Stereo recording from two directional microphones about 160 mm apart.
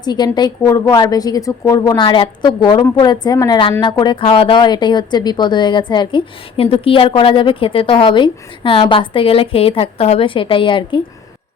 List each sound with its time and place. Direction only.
0.0 s a woman's voice: 25° left (ahead or behind)